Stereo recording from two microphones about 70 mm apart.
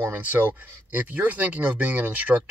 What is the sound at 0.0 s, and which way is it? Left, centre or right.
Speech, right.